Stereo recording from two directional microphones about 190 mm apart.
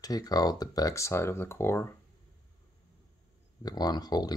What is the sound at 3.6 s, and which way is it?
Speech, 20° left (ahead or behind).